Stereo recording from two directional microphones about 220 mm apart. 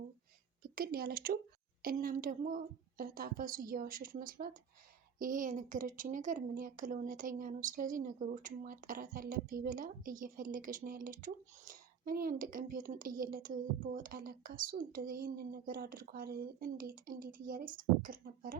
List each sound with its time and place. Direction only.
0.6 s speech: 40° right (ahead or behind)